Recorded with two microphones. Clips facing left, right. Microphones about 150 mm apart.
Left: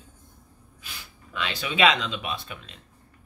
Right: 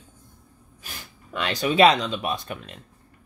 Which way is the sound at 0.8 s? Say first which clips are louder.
Right 3 dB; 45° right (ahead or behind).